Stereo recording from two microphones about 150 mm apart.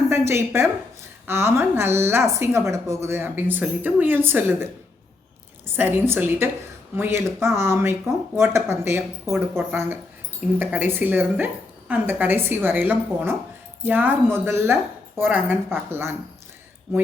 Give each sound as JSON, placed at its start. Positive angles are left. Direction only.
{"t": 0.1, "sound": "a woman's voice", "side_deg": -15}